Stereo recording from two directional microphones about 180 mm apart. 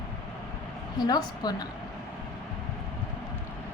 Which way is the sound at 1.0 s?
20° left (ahead or behind).